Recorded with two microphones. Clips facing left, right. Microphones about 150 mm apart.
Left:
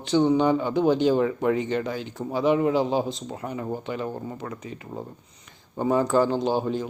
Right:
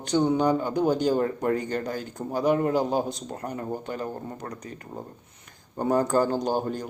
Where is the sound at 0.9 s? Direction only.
45° right (ahead or behind).